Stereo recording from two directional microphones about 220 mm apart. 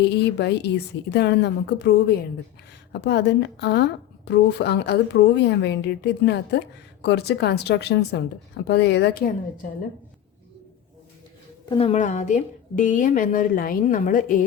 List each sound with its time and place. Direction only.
0.0 s a woman's voice: 50° left (ahead or behind)
11.7 s a woman's voice: 25° left (ahead or behind)